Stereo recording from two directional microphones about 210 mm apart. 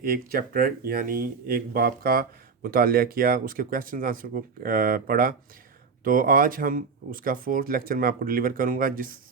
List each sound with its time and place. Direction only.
0.0 s speech: 45° right (ahead or behind)